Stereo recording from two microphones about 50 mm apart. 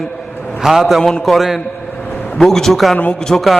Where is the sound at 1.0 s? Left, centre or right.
Centre.